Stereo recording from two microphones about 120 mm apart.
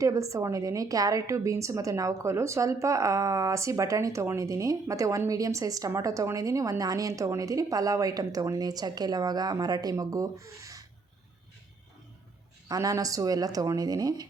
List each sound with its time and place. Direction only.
0.0 s a woman's voice: 25° right (ahead or behind)
12.6 s speech: 30° right (ahead or behind)